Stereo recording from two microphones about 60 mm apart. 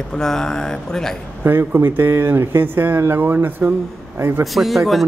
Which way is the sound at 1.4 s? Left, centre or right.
Right.